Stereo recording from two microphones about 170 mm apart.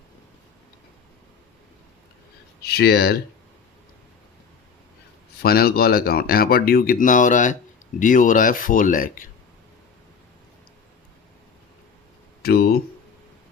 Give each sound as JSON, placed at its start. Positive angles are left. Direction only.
{"t": 2.6, "sound": "speech", "side_deg": 70}
{"t": 5.4, "sound": "speech", "side_deg": 65}
{"t": 12.4, "sound": "speech", "side_deg": 65}